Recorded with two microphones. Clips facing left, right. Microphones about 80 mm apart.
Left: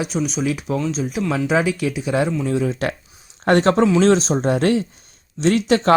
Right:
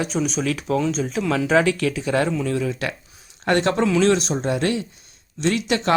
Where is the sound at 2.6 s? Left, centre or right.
Left.